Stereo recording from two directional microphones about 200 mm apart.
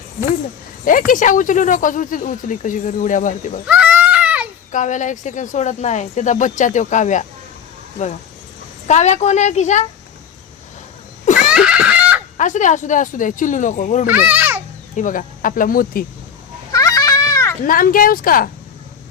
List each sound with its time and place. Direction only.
0.9 s speech: 40° left (ahead or behind)
3.7 s a sound: 5° right (ahead or behind)
4.7 s speech: 40° left (ahead or behind)
8.9 s speech: 35° left (ahead or behind)
11.5 s a sound: 5° right (ahead or behind)
12.4 s speech: 40° left (ahead or behind)
14.1 s a child's voice: 10° right (ahead or behind)
14.9 s speech: 40° left (ahead or behind)
16.7 s a sound: 15° left (ahead or behind)
17.7 s speech: 45° left (ahead or behind)